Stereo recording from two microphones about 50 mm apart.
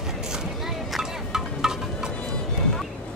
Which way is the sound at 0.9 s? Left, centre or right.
Centre.